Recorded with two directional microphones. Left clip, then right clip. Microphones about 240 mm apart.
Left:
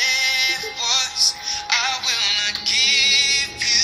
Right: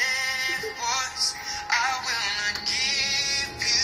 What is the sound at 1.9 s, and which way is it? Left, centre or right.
Music, left.